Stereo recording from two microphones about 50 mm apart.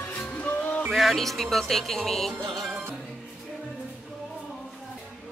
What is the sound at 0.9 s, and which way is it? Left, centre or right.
Speech, centre.